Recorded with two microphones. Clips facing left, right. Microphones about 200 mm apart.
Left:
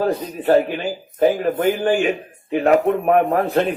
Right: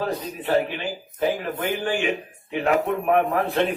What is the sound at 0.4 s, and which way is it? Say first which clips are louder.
A man's voice: left 7 dB; 45° left (ahead or behind).